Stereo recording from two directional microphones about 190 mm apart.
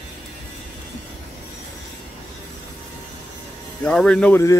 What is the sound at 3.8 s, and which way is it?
Speech, 5° left (ahead or behind).